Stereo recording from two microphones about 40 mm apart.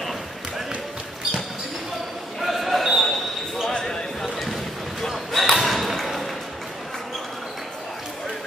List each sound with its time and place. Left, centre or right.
2.4 s basketball bounce: centre
3.7 s basketball bounce: centre
4.2 s a sound: centre
5.1 s basketball bounce: centre